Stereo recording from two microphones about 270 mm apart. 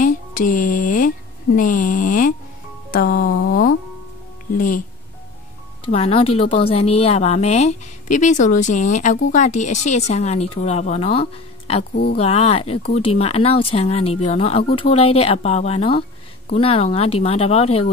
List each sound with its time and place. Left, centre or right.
0.7 s speech: left
2.9 s a sound: left
4.6 s speech: left
5.9 s a woman's voice: left